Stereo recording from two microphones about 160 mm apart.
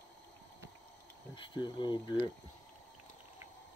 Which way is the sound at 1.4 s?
30° left (ahead or behind).